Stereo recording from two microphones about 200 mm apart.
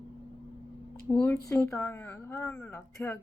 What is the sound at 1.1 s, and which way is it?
A woman's voice, 5° left (ahead or behind).